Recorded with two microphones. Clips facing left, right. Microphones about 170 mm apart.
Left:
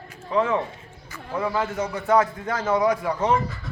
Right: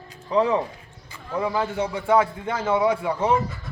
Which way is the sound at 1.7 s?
30° right (ahead or behind).